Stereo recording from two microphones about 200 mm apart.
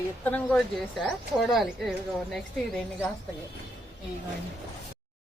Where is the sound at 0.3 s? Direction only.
5° left (ahead or behind).